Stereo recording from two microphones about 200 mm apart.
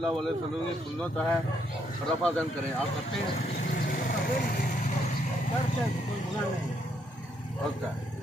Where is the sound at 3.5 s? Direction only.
45° left (ahead or behind).